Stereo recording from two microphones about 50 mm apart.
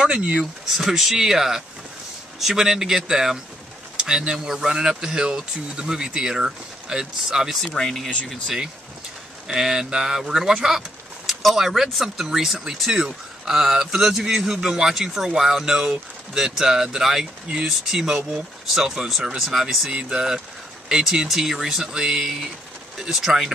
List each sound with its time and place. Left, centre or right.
0.0 s speech: centre
0.7 s speech: centre
4.5 s speech: centre
7.6 s speech: centre
8.3 s speech: centre
19.9 s speech: centre